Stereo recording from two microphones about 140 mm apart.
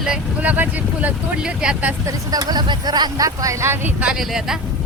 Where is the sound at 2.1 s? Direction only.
25° right (ahead or behind).